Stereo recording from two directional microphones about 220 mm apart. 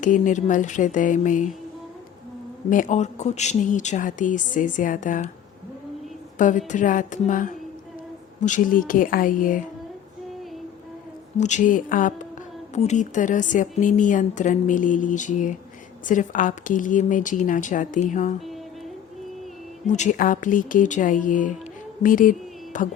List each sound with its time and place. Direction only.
0.0 s speech: 35° left (ahead or behind)
2.6 s speech: 35° left (ahead or behind)
6.7 s speech: 35° left (ahead or behind)
11.3 s speech: 35° left (ahead or behind)
19.9 s speech: 35° left (ahead or behind)